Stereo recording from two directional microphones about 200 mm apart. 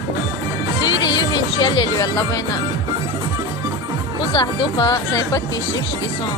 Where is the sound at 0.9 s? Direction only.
75° left (ahead or behind).